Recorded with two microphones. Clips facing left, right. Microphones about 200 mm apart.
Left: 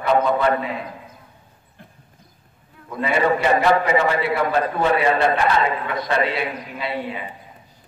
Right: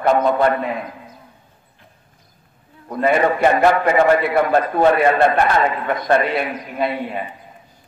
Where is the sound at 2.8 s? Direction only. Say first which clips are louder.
Right 3 dB; 50° right (ahead or behind).